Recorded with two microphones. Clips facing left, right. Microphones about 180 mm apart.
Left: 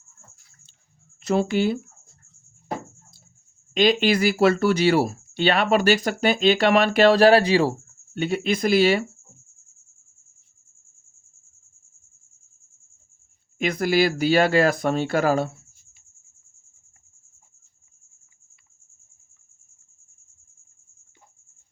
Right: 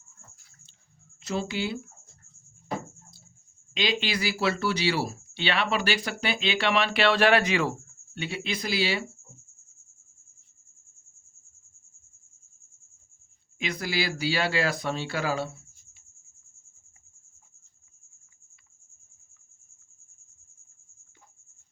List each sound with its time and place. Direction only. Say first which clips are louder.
1.2 s speech: left 9 dB; 55° left (ahead or behind)
3.8 s speech: left 10 dB; 50° left (ahead or behind)
8.1 s speech: left 9 dB; 45° left (ahead or behind)
13.6 s speech: left 10 dB; 50° left (ahead or behind)